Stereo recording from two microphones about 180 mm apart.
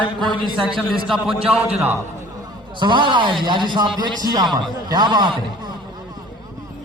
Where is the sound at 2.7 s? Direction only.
25° right (ahead or behind).